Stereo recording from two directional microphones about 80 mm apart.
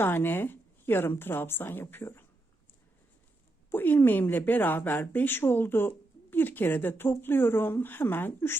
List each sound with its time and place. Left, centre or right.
0.0 s a woman's voice: left
3.7 s a woman's voice: left